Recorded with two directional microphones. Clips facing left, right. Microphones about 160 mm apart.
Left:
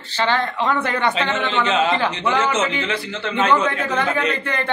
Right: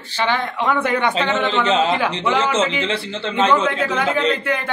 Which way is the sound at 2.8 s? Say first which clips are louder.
Right 2 dB; 30° right (ahead or behind).